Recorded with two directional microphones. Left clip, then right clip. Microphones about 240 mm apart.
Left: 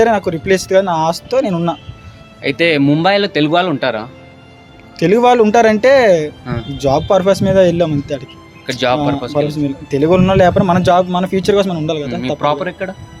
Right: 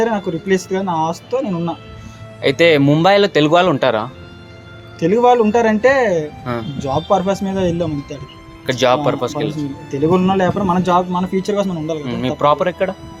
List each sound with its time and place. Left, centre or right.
0.0 s a man's voice: left
2.4 s speech: centre
4.9 s speech: left
6.4 s speech: centre
6.7 s a man's voice: left
9.0 s speech: centre
9.5 s a man's voice: left
12.4 s speech: centre